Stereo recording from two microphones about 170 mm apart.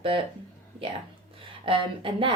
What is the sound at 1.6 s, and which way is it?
Speech, 30° right (ahead or behind).